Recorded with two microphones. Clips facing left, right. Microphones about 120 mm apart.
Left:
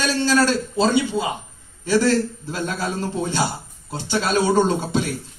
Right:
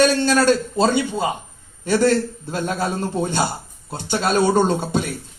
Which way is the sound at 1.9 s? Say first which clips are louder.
Right 1 dB; 50° right (ahead or behind).